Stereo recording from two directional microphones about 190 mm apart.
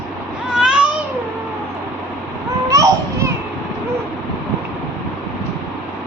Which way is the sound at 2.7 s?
15° right (ahead or behind).